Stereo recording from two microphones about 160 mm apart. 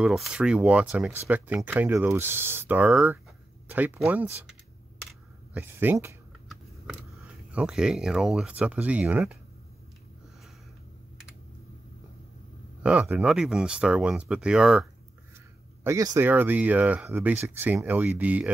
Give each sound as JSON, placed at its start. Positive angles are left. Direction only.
{"t": 0.0, "sound": "speech", "side_deg": -5}
{"t": 5.5, "sound": "speech", "side_deg": -10}
{"t": 7.5, "sound": "speech", "side_deg": -5}
{"t": 12.8, "sound": "speech", "side_deg": -10}
{"t": 15.8, "sound": "speech", "side_deg": -20}